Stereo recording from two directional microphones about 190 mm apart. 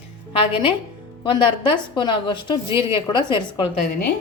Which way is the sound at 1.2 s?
25° left (ahead or behind).